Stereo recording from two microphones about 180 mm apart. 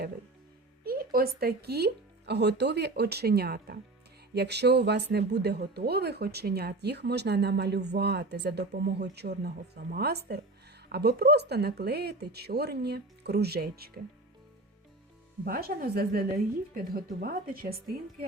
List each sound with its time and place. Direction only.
0.9 s a woman's voice: 55° right (ahead or behind)
15.4 s a woman's voice: 55° right (ahead or behind)